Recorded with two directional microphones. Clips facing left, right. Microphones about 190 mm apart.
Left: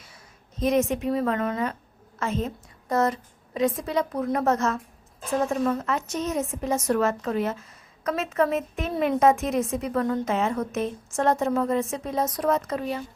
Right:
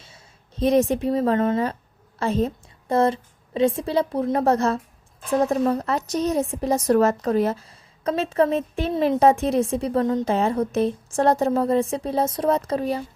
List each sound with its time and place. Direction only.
0.0 s a woman's voice: 30° right (ahead or behind)
10.2 s a woman's voice: 35° right (ahead or behind)